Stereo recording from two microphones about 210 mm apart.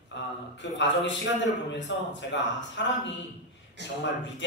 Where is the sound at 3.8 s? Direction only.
55° right (ahead or behind).